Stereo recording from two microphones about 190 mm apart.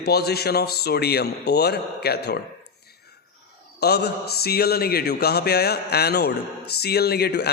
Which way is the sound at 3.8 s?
60° left (ahead or behind).